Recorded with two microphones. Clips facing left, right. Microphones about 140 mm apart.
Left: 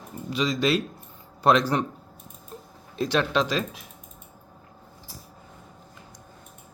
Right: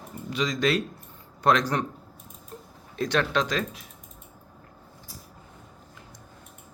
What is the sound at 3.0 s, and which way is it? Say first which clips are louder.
Speech: left 1 dB; 30° left (ahead or behind).